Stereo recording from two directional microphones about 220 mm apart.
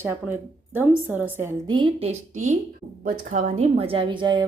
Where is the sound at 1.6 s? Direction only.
25° right (ahead or behind).